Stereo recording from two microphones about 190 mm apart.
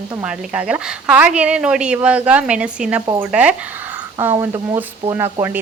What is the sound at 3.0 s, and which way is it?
Speech, 20° right (ahead or behind).